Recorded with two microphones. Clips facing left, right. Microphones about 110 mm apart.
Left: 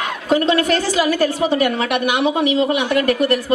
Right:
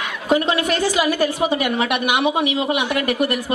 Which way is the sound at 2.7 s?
40° left (ahead or behind).